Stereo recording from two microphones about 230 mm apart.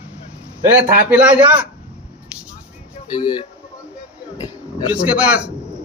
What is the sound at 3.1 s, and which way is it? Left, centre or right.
Speech, centre.